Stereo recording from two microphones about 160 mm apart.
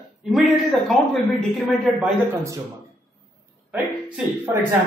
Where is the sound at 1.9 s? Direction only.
15° right (ahead or behind).